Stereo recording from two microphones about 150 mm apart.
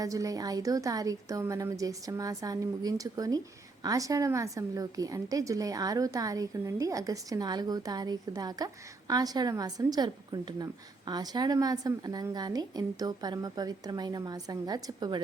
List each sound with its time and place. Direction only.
0.0 s a woman's voice: 25° right (ahead or behind)